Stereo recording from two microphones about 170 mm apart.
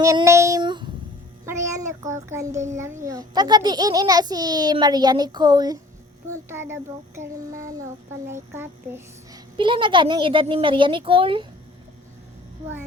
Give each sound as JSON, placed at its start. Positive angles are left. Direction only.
{"t": 0.0, "sound": "child singing", "side_deg": -20}
{"t": 1.8, "sound": "child singing", "side_deg": -45}
{"t": 2.3, "sound": "a child's voice", "side_deg": -20}
{"t": 8.3, "sound": "a child's voice", "side_deg": -15}
{"t": 9.6, "sound": "a child's voice", "side_deg": -30}